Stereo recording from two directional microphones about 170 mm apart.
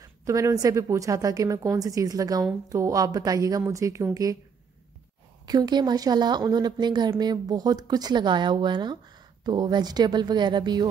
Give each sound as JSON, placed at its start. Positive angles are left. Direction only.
{"t": 0.0, "sound": "speech", "side_deg": -20}
{"t": 5.5, "sound": "speech", "side_deg": -25}